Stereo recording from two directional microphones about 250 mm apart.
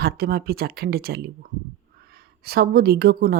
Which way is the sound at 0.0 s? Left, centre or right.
Right.